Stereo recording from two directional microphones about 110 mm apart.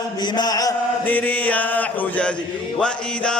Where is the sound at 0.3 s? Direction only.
35° left (ahead or behind).